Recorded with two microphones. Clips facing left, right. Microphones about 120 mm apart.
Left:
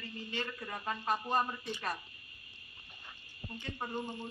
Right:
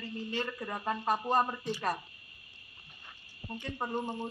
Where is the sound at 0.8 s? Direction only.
40° right (ahead or behind).